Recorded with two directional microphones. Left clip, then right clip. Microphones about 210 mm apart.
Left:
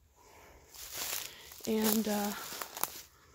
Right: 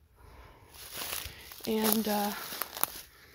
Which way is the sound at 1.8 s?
40° right (ahead or behind).